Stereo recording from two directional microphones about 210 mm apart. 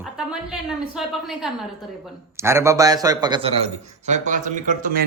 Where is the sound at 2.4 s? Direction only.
15° right (ahead or behind); by 5.1 s 40° right (ahead or behind).